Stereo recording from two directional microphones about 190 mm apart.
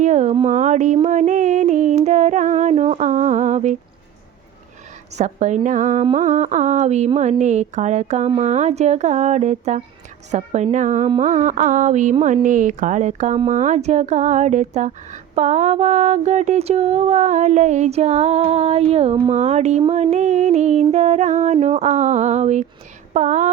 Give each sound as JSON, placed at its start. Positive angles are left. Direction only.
{"t": 0.0, "sound": "speech", "side_deg": -40}
{"t": 0.9, "sound": "female singing", "side_deg": -40}
{"t": 5.1, "sound": "speech", "side_deg": -40}